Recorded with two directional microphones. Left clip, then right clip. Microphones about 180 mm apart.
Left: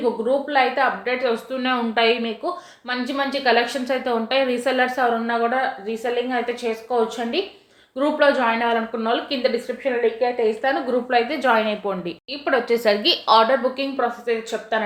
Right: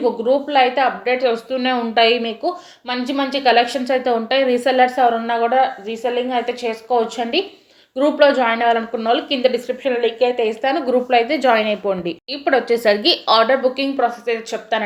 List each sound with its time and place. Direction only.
0.0 s speech: 25° right (ahead or behind)